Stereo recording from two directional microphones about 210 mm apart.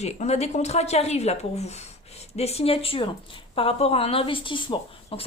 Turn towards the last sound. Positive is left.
turn(degrees=25)  # may be behind; listen again after turning